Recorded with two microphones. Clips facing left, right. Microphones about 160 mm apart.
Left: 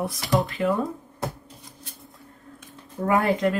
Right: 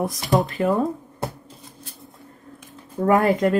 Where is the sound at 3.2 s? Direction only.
45° right (ahead or behind).